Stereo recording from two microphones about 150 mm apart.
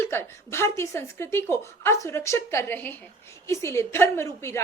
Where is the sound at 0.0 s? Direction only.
15° left (ahead or behind).